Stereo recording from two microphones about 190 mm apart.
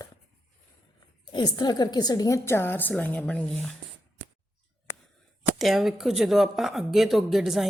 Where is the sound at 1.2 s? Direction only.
20° left (ahead or behind); by 3.8 s 5° left (ahead or behind).